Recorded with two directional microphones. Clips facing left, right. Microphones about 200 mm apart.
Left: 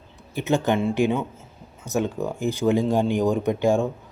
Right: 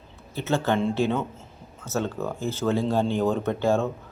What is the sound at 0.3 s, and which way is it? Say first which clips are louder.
Speech: left 2 dB; 15° left (ahead or behind).